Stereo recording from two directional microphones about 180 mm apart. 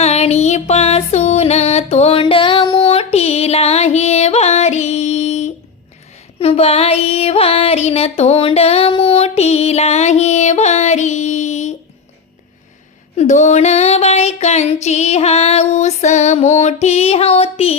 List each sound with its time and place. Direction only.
0.0 s music: 35° left (ahead or behind)
6.4 s child singing: 30° left (ahead or behind)
13.1 s child singing: 40° left (ahead or behind)